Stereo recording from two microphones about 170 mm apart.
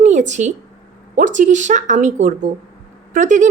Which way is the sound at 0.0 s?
45° right (ahead or behind).